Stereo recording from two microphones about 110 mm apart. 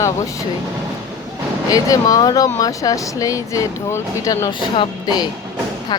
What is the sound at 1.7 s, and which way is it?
Speech, 35° left (ahead or behind).